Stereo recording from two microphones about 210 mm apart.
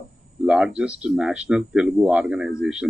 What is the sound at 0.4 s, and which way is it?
Speech, 5° right (ahead or behind).